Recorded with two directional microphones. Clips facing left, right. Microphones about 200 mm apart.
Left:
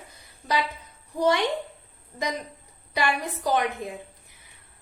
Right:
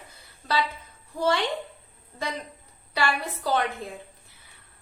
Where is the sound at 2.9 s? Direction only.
15° left (ahead or behind).